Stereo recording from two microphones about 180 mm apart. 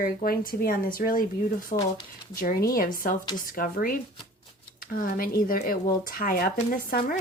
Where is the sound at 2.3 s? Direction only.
55° left (ahead or behind).